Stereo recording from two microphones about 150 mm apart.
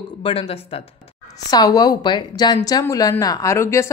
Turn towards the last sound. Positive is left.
turn(degrees=20)  # may be behind; listen again after turning